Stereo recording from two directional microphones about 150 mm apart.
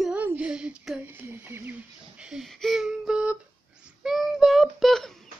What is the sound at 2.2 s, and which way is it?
Speech, centre (ahead or behind).